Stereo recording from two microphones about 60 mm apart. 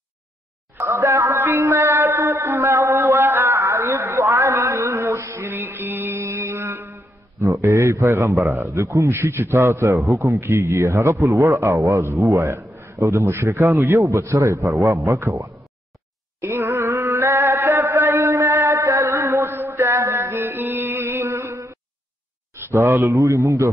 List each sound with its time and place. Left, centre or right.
0.8 s a sound: right
5.5 s music: right
6.2 s mantra: right
7.3 s mantra: right
7.6 s a man's voice: right
16.3 s chant: right
20.3 s music: right
22.6 s a sound: right
22.8 s a man's voice: right